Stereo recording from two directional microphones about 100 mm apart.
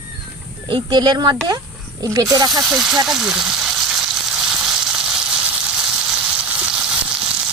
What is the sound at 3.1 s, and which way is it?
Frying, 5° right (ahead or behind).